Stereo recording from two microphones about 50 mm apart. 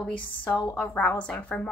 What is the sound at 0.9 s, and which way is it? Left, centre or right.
Speech, left.